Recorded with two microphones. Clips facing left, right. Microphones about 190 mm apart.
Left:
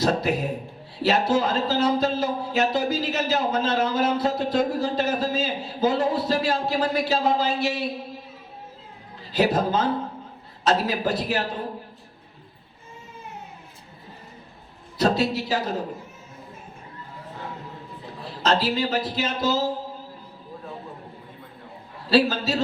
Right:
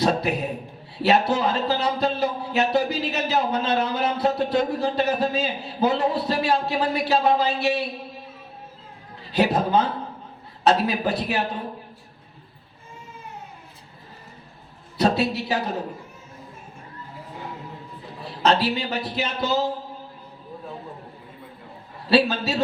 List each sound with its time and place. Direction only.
0.0 s speech: 65° right (ahead or behind)
9.3 s speech: 65° right (ahead or behind)
14.9 s speech: 65° right (ahead or behind)
18.4 s speech: 65° right (ahead or behind)
22.1 s speech: 65° right (ahead or behind)